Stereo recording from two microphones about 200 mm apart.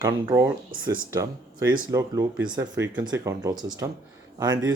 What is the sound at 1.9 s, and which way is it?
Speech, 15° right (ahead or behind).